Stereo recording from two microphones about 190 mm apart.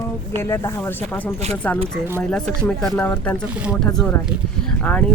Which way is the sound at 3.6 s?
5° right (ahead or behind).